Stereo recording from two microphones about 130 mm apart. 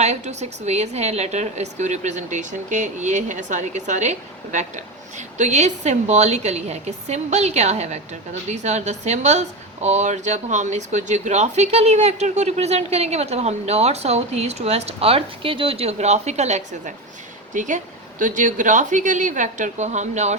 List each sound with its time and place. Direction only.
0.0 s a woman's voice: 60° right (ahead or behind)
17.5 s speech: 75° right (ahead or behind)
18.2 s a woman's voice: 90° right; by 20.3 s 65° right (ahead or behind)